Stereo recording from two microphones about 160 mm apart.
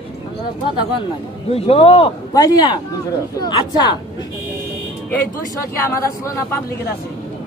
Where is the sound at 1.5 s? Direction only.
40° left (ahead or behind).